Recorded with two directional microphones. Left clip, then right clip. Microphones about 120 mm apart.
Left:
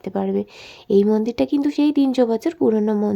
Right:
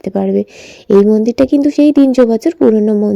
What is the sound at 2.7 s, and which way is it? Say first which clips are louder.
Speech: right 8 dB; 15° right (ahead or behind).